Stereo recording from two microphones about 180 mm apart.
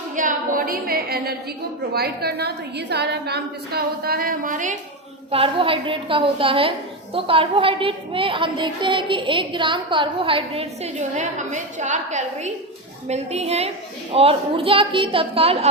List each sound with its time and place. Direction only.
0.2 s a woman's voice: 50° right (ahead or behind)
5.3 s a woman's voice: 30° right (ahead or behind)